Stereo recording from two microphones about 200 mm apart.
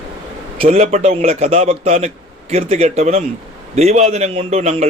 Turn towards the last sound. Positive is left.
turn(degrees=-35)  # may be behind; listen again after turning